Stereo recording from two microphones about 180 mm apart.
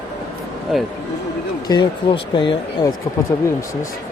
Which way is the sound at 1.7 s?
25° left (ahead or behind).